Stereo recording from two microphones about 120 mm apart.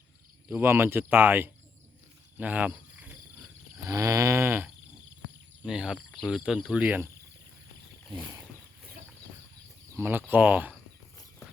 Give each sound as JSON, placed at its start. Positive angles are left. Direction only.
{"t": 0.4, "sound": "speech", "side_deg": -15}
{"t": 3.8, "sound": "livestock", "side_deg": -25}
{"t": 5.6, "sound": "speech", "side_deg": -5}
{"t": 10.0, "sound": "speech", "side_deg": -15}